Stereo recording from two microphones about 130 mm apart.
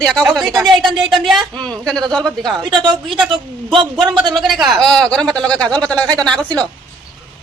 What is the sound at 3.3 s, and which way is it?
Speech, 40° right (ahead or behind).